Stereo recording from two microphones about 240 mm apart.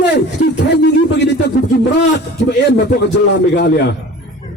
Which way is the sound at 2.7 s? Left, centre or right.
Left.